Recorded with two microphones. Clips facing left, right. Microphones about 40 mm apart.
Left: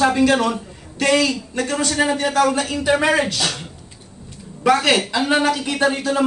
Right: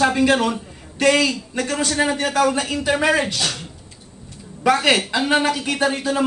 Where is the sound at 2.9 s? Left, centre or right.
Centre.